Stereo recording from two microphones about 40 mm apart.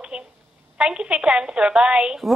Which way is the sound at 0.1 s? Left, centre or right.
Right.